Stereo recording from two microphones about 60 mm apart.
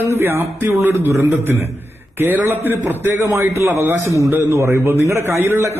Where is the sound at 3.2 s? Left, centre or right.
Right.